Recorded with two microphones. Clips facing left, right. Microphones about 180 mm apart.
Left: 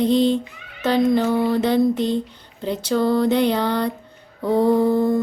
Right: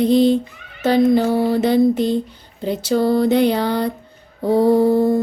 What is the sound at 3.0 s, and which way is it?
Mantra, 40° right (ahead or behind).